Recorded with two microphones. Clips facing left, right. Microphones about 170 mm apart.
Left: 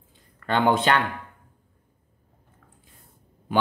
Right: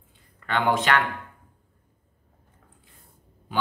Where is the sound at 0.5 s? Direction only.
30° left (ahead or behind).